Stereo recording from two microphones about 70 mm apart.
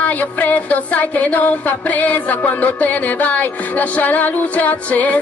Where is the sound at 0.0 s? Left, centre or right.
Left.